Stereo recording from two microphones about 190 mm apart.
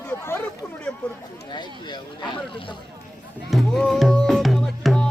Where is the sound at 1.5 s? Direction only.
25° left (ahead or behind).